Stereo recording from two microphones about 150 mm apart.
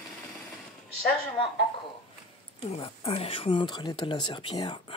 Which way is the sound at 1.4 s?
35° left (ahead or behind).